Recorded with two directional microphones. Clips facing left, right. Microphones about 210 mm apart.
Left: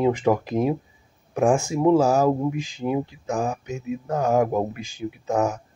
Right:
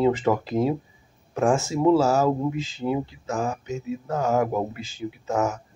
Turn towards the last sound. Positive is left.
turn(degrees=15)  # may be behind; listen again after turning